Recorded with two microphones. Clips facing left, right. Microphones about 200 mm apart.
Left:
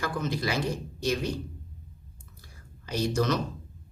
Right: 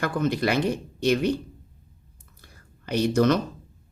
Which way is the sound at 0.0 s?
60° right (ahead or behind).